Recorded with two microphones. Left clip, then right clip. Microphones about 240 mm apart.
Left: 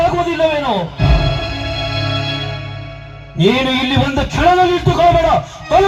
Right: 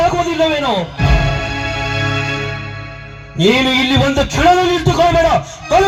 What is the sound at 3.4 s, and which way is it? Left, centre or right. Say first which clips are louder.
A man's voice: right 2 dB; right.